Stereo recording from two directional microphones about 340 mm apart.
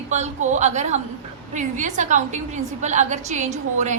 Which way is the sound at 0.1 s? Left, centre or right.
Right.